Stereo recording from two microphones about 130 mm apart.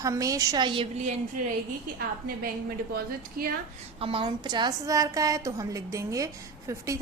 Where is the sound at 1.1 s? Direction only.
70° right (ahead or behind).